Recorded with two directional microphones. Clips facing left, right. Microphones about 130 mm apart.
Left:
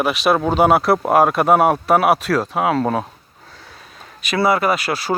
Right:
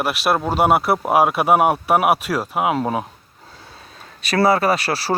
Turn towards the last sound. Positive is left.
turn(degrees=-35)  # may be behind; listen again after turning